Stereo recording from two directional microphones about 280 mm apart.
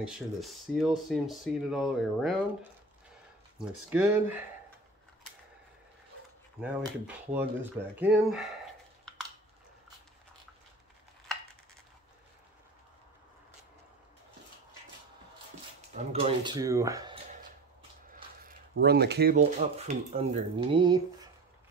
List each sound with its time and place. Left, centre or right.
0.0 s speech: centre
3.5 s speech: centre
6.6 s speech: centre
15.9 s speech: right
18.4 s speech: right; by 21.3 s centre